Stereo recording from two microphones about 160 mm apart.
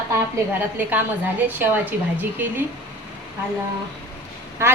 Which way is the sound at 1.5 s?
10° right (ahead or behind).